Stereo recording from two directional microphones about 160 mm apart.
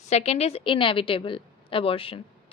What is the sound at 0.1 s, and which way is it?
A woman's voice, 40° left (ahead or behind).